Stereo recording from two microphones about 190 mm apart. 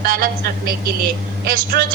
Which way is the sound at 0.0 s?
50° right (ahead or behind).